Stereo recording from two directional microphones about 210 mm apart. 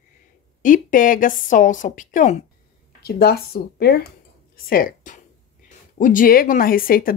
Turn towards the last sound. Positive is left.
turn(degrees=45)  # may be behind; listen again after turning